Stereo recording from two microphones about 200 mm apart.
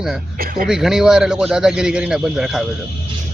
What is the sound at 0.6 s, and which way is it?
Speech, centre (ahead or behind).